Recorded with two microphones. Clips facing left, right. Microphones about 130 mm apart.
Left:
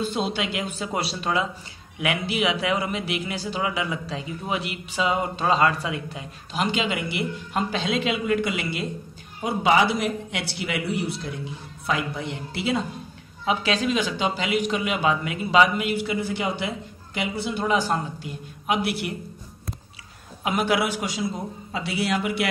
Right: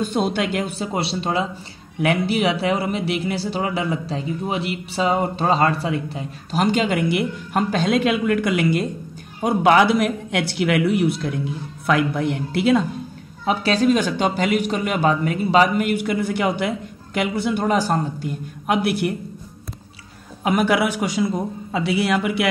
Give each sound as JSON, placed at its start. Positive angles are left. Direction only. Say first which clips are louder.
{"t": 0.0, "sound": "a man's voice", "louder": "right 5 dB", "side_deg": -50}
{"t": 0.7, "sound": "a woman's voice", "louder": "right 4 dB", "side_deg": -30}
{"t": 13.5, "sound": "a man's voice", "louder": "right 6 dB", "side_deg": -40}
{"t": 15.9, "sound": "a woman's voice", "louder": "right 4 dB", "side_deg": -55}
{"t": 20.4, "sound": "a man's voice", "louder": "right 5 dB", "side_deg": -50}